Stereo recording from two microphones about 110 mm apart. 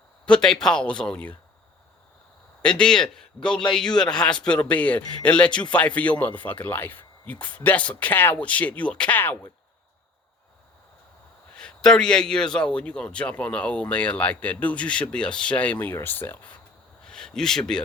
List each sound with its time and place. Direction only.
0.3 s a man's voice: 5° left (ahead or behind)
2.6 s a man's voice: 10° left (ahead or behind)
11.5 s a man's voice: 5° left (ahead or behind)
17.0 s a sound: 5° left (ahead or behind)